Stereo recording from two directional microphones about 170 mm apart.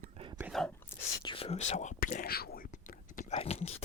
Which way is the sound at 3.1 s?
45° left (ahead or behind).